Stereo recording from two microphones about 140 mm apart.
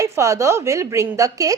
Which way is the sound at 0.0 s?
20° right (ahead or behind).